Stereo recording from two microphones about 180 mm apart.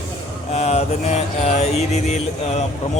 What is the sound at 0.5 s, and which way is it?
Mantra, 35° left (ahead or behind).